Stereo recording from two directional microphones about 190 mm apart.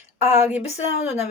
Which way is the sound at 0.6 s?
35° left (ahead or behind).